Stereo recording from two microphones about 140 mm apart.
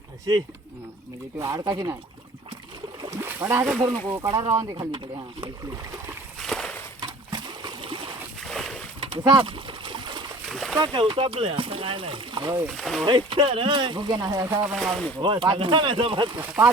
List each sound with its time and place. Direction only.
0.3 s speech: 30° right (ahead or behind)
3.0 s speech: 20° right (ahead or behind)
4.4 s speech: 35° right (ahead or behind)
6.4 s a sound: 5° left (ahead or behind)
7.0 s splash: 30° right (ahead or behind)
8.4 s boat: centre (ahead or behind)
9.0 s pigeon: 40° right (ahead or behind)
10.5 s splash: centre (ahead or behind)
10.8 s speech: 35° right (ahead or behind)
12.7 s speech: centre (ahead or behind)
13.1 s speech: 35° right (ahead or behind)
14.4 s speech: 15° right (ahead or behind)
14.7 s speech: centre (ahead or behind)
15.2 s speech: 35° right (ahead or behind)